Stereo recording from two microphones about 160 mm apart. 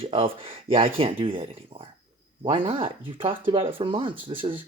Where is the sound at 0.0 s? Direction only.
35° right (ahead or behind).